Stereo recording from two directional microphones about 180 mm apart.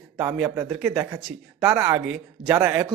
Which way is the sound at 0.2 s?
10° right (ahead or behind).